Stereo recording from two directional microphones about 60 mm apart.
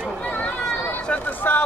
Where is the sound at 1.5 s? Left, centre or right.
Left.